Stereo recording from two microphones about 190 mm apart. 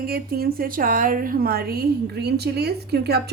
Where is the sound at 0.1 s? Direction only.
50° right (ahead or behind).